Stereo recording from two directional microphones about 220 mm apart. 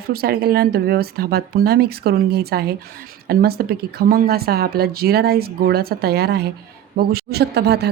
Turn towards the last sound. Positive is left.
turn(degrees=-45)  # may be behind; listen again after turning